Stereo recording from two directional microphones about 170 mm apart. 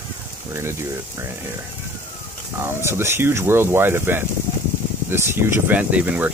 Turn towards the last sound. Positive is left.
turn(degrees=-10)  # may be behind; listen again after turning